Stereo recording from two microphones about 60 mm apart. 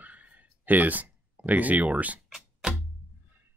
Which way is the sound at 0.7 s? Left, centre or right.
Right.